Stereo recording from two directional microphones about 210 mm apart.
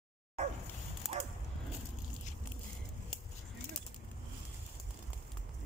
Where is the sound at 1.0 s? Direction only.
Centre (ahead or behind).